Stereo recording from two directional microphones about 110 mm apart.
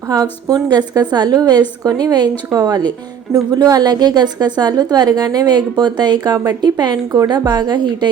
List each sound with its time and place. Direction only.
0.1 s a woman's voice: 35° right (ahead or behind)